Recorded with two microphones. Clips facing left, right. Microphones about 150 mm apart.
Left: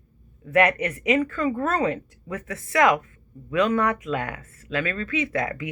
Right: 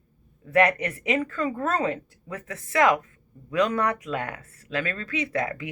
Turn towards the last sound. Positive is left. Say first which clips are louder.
# left 2 dB
turn(degrees=-30)  # may be behind; listen again after turning